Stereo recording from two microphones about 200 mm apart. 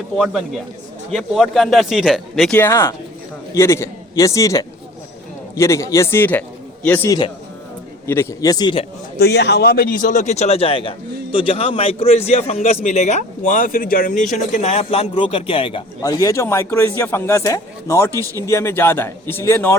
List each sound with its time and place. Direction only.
1.1 s a man's voice: centre (ahead or behind); by 8.9 s 25° left (ahead or behind)
9.1 s a man's voice: 55° left (ahead or behind); by 19.7 s 15° left (ahead or behind)